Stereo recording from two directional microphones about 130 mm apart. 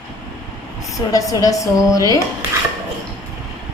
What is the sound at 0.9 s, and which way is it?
Speech, 25° left (ahead or behind).